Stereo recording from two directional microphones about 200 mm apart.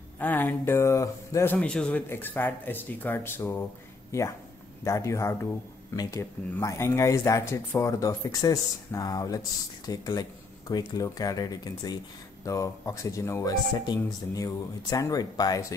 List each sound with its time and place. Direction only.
0.2 s speech: 10° left (ahead or behind)
4.8 s speech: 15° left (ahead or behind)